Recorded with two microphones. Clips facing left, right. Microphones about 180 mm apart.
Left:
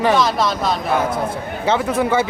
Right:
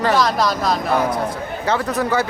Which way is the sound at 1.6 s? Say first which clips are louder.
Left 3 dB; 25° left (ahead or behind).